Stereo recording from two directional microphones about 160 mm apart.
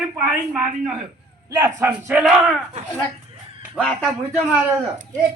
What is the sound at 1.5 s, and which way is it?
Speech, 20° right (ahead or behind).